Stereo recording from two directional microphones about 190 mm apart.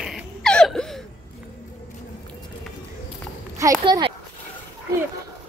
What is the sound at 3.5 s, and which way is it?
Speech, 15° right (ahead or behind).